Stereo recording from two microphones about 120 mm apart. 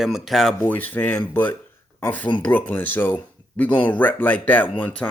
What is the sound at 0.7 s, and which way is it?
Speech, 15° left (ahead or behind).